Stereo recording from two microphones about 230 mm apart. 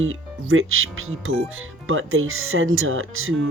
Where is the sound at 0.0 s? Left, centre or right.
Right.